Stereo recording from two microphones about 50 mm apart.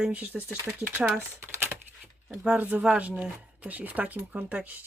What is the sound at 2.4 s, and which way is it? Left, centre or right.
Speech, right.